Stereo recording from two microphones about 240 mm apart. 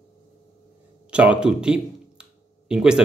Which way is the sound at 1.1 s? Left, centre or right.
Centre.